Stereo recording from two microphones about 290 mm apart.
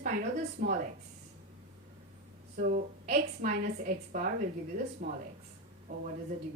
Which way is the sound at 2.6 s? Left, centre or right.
Right.